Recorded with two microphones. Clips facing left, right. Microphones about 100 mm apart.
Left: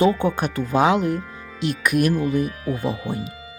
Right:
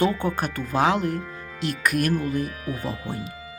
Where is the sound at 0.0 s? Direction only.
20° left (ahead or behind).